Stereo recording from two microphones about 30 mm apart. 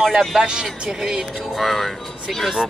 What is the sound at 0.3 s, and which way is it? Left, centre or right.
Speech, right.